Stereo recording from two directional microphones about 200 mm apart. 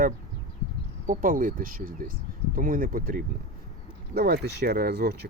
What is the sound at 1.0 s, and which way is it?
Speech, 45° right (ahead or behind).